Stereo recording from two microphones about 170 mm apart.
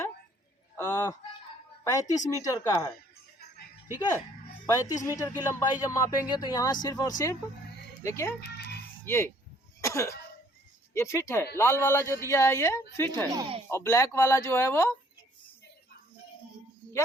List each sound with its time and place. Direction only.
0.8 s fowl: 15° left (ahead or behind)
1.8 s speech: 20° left (ahead or behind)
4.6 s a woman's voice: 15° left (ahead or behind)
9.8 s cough: 15° left (ahead or behind)
10.9 s a woman's voice: 15° left (ahead or behind)
13.3 s speech: 25° right (ahead or behind)
13.7 s a woman's voice: 15° left (ahead or behind)